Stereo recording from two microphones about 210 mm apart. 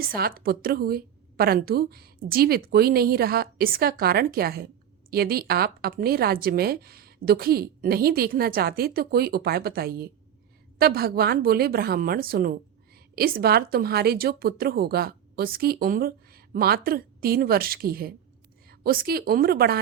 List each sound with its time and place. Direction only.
0.0 s a woman's voice: 45° right (ahead or behind)